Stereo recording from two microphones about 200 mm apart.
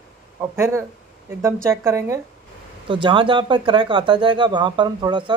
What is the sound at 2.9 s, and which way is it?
Speech, 25° right (ahead or behind).